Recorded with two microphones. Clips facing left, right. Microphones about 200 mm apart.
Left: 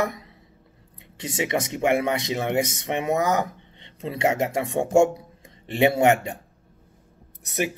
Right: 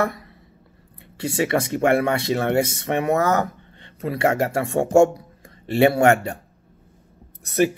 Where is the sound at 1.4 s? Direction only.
15° left (ahead or behind).